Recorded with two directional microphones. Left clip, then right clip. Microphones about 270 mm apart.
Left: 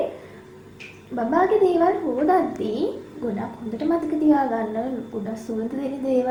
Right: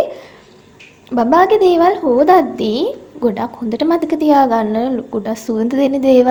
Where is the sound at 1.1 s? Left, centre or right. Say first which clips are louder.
Right 9 dB; right.